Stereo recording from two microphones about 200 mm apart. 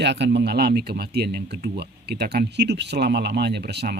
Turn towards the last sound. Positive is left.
turn(degrees=-55)  # may be behind; listen again after turning